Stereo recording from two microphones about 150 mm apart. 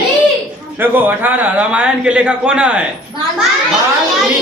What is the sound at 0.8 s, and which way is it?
A man's voice, 10° right (ahead or behind).